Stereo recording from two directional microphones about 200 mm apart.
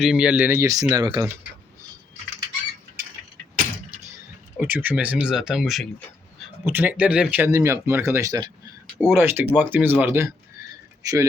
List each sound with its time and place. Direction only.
0.0 s speech: 5° right (ahead or behind)
4.5 s a man's voice: 10° right (ahead or behind)